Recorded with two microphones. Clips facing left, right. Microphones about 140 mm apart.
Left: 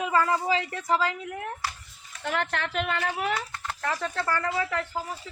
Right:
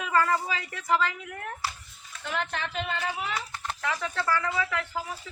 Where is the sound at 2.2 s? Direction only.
65° left (ahead or behind).